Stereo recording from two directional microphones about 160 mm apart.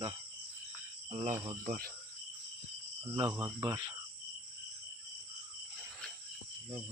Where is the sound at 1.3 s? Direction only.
20° right (ahead or behind).